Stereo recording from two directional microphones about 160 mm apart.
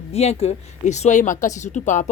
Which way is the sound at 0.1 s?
40° left (ahead or behind).